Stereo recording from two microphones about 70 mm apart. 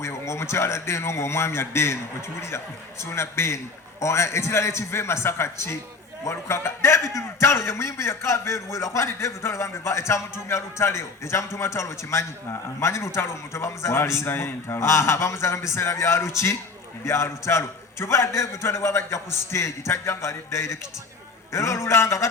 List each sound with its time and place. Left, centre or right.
0.0 s a man's voice: left
3.0 s a man's voice: left